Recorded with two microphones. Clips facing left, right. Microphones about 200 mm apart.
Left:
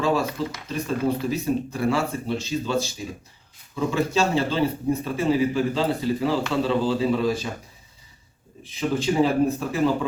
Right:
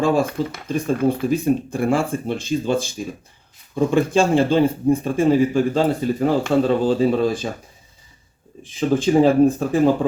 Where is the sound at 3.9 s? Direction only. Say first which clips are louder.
Right 5 dB; 50° right (ahead or behind).